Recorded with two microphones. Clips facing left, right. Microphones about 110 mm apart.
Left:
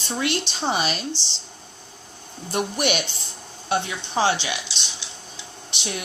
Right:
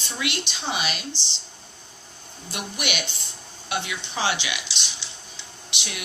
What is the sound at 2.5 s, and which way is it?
Speech, 40° left (ahead or behind).